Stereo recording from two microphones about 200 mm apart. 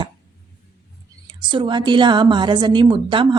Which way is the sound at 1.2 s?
25° right (ahead or behind).